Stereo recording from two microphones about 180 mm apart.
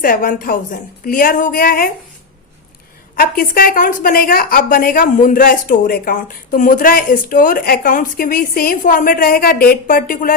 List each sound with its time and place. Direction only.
0.0 s a woman's voice: 50° left (ahead or behind)
3.2 s a woman's voice: 55° left (ahead or behind)